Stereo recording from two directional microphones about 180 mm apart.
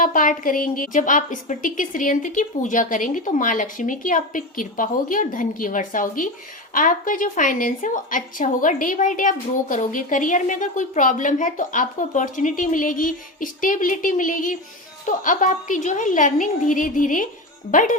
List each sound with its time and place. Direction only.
0.0 s a woman's voice: 45° left (ahead or behind)